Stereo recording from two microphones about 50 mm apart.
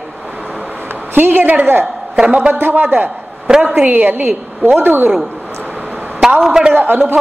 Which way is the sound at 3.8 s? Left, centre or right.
Right.